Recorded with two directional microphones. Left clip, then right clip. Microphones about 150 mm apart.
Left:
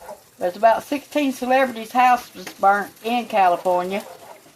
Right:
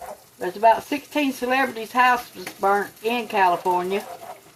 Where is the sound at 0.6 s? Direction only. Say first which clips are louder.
Even; 60° left (ahead or behind).